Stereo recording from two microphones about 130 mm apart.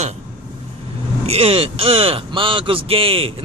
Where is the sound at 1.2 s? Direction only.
50° right (ahead or behind).